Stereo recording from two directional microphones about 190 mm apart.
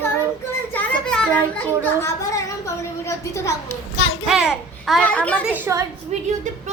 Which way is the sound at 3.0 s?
15° left (ahead or behind).